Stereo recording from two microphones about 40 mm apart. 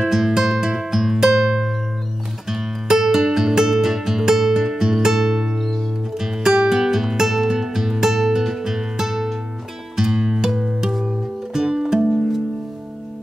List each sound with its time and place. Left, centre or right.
0.0 s music: centre
9.9 s music: centre